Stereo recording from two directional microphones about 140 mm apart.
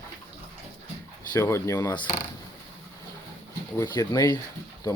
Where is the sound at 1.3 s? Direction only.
20° left (ahead or behind).